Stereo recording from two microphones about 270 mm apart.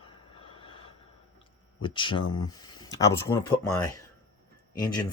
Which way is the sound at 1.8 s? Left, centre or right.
Centre.